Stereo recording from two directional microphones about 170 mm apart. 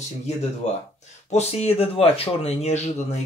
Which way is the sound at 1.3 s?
40° left (ahead or behind).